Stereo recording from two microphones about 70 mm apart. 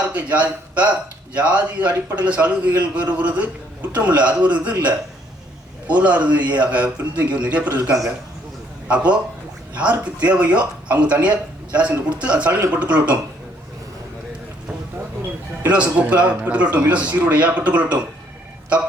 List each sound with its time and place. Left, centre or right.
0.1 s a man's voice: right
15.6 s speech: right